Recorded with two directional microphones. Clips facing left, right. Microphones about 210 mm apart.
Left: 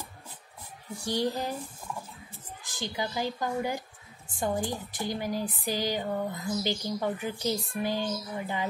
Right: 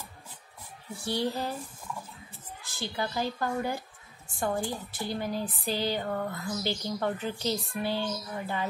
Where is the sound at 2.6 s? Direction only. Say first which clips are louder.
Even; 15° left (ahead or behind).